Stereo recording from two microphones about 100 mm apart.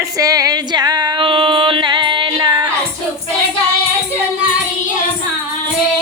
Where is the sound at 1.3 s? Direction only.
60° right (ahead or behind); by 2.6 s 45° right (ahead or behind).